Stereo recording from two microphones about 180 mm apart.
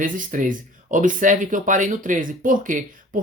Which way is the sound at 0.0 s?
50° right (ahead or behind).